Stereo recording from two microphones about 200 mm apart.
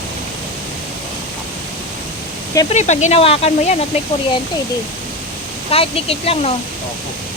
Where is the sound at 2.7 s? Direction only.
35° left (ahead or behind).